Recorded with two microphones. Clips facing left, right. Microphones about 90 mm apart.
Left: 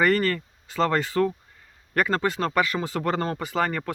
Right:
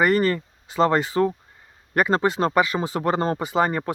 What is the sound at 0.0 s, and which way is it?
Speech, 20° right (ahead or behind).